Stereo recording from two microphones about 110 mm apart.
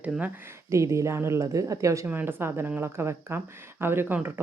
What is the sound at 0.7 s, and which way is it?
Speech, 25° right (ahead or behind).